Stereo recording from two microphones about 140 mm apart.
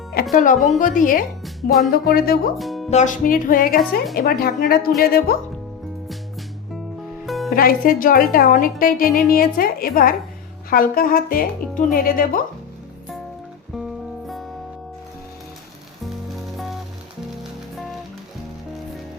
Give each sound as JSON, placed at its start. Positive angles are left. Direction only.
{"t": 0.1, "sound": "speech", "side_deg": 90}
{"t": 1.9, "sound": "a woman's voice", "side_deg": 90}
{"t": 2.6, "sound": "speech", "side_deg": 0}
{"t": 2.9, "sound": "a woman's voice", "side_deg": 65}
{"t": 7.3, "sound": "music", "side_deg": 0}
{"t": 7.5, "sound": "a woman's voice", "side_deg": 90}
{"t": 13.7, "sound": "music", "side_deg": 0}